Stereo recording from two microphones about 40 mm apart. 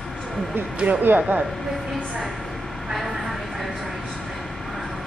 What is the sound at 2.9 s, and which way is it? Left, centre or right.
Vehicle, centre.